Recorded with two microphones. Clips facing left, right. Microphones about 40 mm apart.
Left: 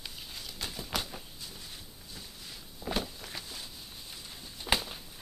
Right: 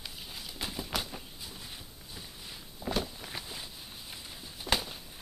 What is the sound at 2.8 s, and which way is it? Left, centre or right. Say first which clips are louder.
Walk: right 1 dB; centre.